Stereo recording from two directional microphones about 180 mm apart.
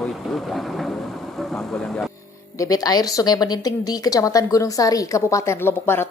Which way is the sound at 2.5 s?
20° left (ahead or behind).